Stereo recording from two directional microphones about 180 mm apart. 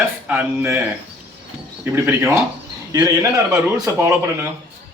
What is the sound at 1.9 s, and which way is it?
A man's voice, 15° right (ahead or behind).